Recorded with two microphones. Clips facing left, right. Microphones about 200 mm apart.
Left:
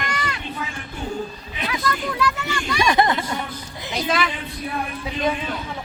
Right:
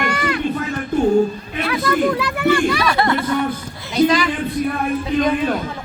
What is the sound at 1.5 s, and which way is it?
Speech, 55° right (ahead or behind).